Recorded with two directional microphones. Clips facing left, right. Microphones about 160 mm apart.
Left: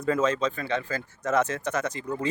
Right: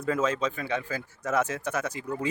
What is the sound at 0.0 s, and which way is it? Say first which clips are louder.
Speech: left 2 dB; 5° right (ahead or behind).